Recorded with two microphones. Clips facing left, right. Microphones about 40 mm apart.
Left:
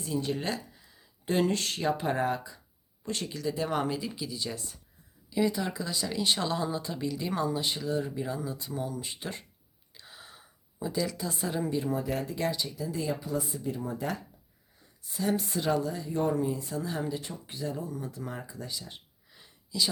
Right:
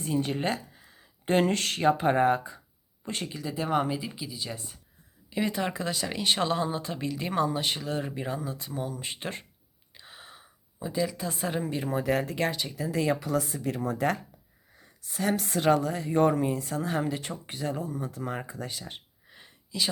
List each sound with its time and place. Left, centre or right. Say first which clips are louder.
0.0 s speech: right 3 dB; right
1.8 s speech: right 7 dB; right
3.2 s speech: even; centre
5.3 s a woman's voice: even; right
8.7 s speech: right 1 dB; right
9.0 s speech: right 2 dB; right
9.9 s gasp: right 2 dB; right
10.3 s a sound: left 2 dB; centre
11.2 s a woman's voice: right 1 dB; right
19.3 s a sound: even; right